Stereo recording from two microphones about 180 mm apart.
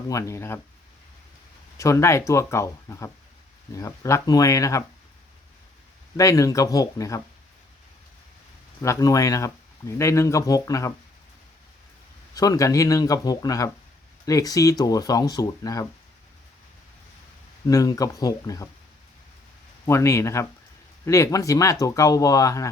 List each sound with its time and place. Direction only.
0.1 s speech: 15° left (ahead or behind)
1.8 s speech: 15° left (ahead or behind)
6.1 s speech: 20° left (ahead or behind)
8.8 s speech: 20° left (ahead or behind)
12.3 s speech: 20° left (ahead or behind)
17.7 s speech: 20° left (ahead or behind)
19.8 s speech: 15° left (ahead or behind)